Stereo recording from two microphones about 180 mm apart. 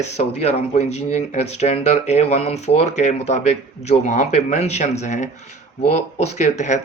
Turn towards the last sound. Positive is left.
turn(degrees=40)  # may be behind; listen again after turning